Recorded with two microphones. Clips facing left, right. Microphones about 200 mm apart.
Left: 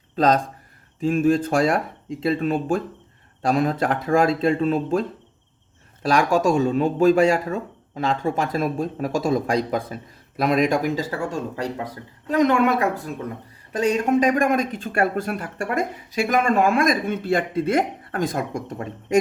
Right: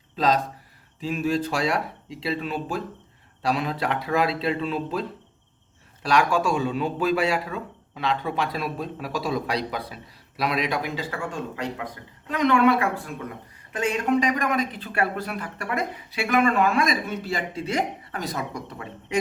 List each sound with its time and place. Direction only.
0.2 s speech: 45° left (ahead or behind)